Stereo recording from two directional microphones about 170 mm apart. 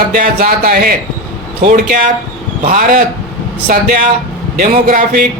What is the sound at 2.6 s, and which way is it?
A man's voice, 50° right (ahead or behind).